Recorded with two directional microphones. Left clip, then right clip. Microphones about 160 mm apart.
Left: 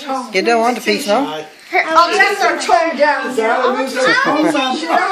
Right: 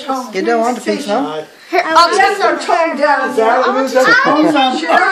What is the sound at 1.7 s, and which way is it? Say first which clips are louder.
Speech: right 2 dB; 40° right (ahead or behind).